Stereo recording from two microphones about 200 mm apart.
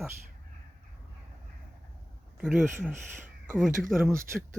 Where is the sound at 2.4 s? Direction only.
5° right (ahead or behind).